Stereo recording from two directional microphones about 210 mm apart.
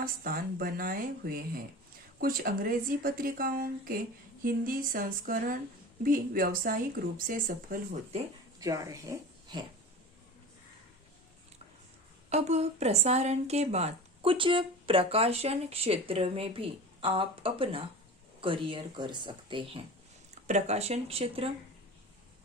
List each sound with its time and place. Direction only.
0.0 s a woman's voice: 45° right (ahead or behind)
8.5 s speech: 15° right (ahead or behind)
12.3 s a woman's voice: 30° right (ahead or behind)